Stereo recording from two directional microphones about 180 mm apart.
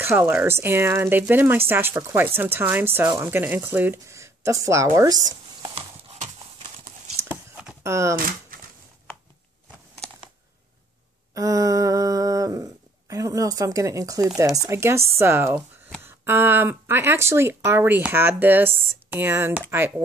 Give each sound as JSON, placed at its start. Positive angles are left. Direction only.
{"t": 0.0, "sound": "speech", "side_deg": -10}
{"t": 7.2, "sound": "chopping", "side_deg": -10}
{"t": 8.2, "sound": "speech", "side_deg": -50}
{"t": 11.3, "sound": "speech", "side_deg": -20}